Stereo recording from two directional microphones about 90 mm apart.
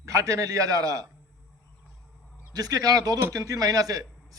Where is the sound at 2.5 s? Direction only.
45° right (ahead or behind).